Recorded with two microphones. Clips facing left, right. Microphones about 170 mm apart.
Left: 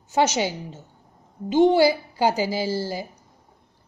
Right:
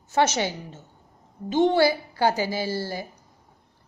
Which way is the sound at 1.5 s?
15° left (ahead or behind).